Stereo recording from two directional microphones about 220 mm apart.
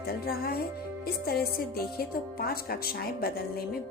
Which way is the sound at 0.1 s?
45° left (ahead or behind).